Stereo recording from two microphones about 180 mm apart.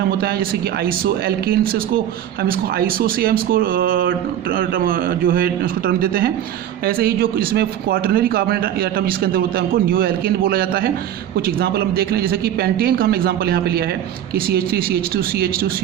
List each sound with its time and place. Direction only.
0.2 s speech: 55° right (ahead or behind)